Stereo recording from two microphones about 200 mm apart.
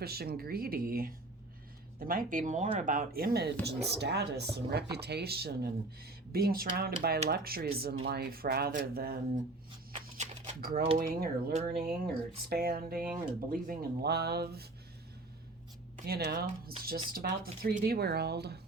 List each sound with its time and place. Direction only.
0.0 s speech: 50° right (ahead or behind)
9.9 s shuffling cards: 35° right (ahead or behind)
10.9 s speech: 45° right (ahead or behind)
16.0 s speech: 50° right (ahead or behind)